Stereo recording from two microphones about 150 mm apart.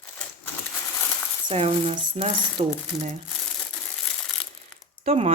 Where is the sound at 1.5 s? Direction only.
40° right (ahead or behind).